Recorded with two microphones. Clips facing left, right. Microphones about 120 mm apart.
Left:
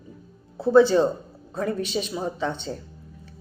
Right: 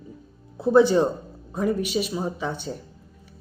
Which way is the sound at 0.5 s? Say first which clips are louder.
Left 1 dB; 15° right (ahead or behind).